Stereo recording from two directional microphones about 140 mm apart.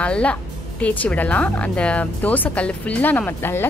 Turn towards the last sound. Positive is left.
turn(degrees=15)  # may be behind; listen again after turning